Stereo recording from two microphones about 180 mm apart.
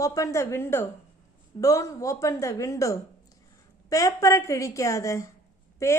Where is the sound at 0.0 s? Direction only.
20° left (ahead or behind).